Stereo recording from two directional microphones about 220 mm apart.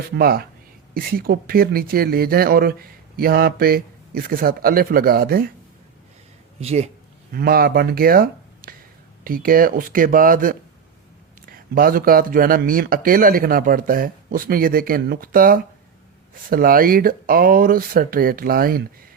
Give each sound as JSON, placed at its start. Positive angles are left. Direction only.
{"t": 0.1, "sound": "speech", "side_deg": -45}
{"t": 6.6, "sound": "speech", "side_deg": -30}
{"t": 7.3, "sound": "speech", "side_deg": -45}